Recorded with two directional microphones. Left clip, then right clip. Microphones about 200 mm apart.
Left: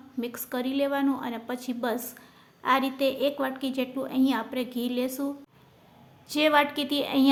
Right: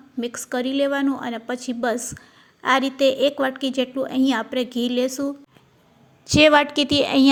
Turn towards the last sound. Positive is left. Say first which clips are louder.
# right 7 dB
turn(degrees=-30)  # may be behind; listen again after turning